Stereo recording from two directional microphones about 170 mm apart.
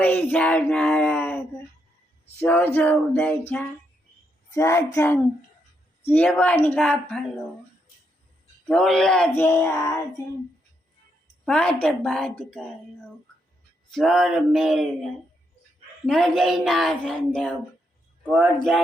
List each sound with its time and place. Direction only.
0.0 s speech: 10° left (ahead or behind)
8.6 s speech: 5° left (ahead or behind)
11.4 s speech: 5° left (ahead or behind)
13.9 s speech: centre (ahead or behind)